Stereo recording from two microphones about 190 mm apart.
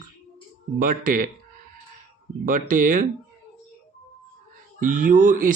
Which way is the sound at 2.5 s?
45° right (ahead or behind).